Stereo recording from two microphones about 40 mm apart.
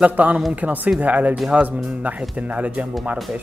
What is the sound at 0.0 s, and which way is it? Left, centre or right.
Speech, right.